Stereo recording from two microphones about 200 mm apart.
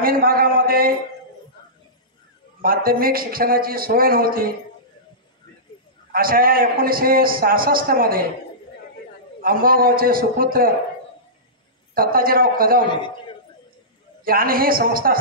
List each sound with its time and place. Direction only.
0.0 s speech: 45° right (ahead or behind)
2.6 s a man's voice: 45° right (ahead or behind)
6.1 s a man's voice: 45° right (ahead or behind)
9.4 s a man's voice: 45° right (ahead or behind)
11.9 s a man's voice: 45° right (ahead or behind)
14.2 s a man's voice: 45° right (ahead or behind)